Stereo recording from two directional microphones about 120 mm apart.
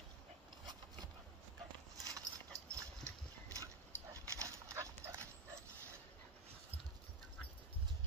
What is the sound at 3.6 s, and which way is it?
Dog, 25° right (ahead or behind).